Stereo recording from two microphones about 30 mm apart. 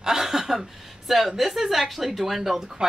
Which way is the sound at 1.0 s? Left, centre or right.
Centre.